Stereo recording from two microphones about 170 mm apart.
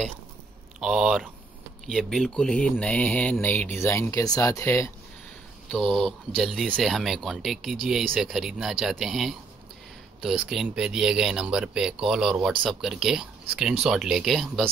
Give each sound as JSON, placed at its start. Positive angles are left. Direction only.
{"t": 0.7, "sound": "speech", "side_deg": -5}
{"t": 5.7, "sound": "speech", "side_deg": 0}